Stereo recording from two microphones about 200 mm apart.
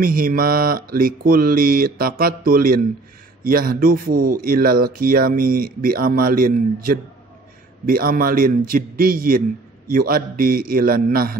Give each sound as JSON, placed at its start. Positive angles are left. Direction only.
{"t": 0.0, "sound": "speech", "side_deg": -45}